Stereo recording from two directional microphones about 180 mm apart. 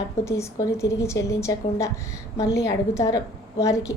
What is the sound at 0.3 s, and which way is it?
A woman's voice, 15° left (ahead or behind).